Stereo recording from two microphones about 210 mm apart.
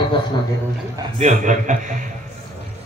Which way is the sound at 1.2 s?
35° right (ahead or behind).